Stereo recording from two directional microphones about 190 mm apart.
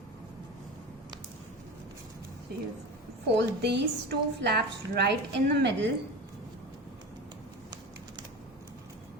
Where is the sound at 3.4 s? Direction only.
65° right (ahead or behind).